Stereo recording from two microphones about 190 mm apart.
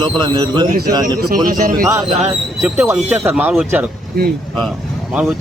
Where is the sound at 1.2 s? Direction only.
50° right (ahead or behind).